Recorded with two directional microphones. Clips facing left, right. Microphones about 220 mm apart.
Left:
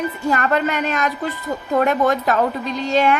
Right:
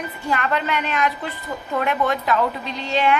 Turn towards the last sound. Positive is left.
turn(degrees=45)  # may be behind; listen again after turning